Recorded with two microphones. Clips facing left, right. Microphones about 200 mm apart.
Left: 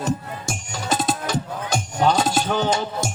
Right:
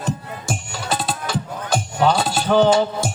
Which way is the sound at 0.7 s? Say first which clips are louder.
Left 4 dB; 40° left (ahead or behind).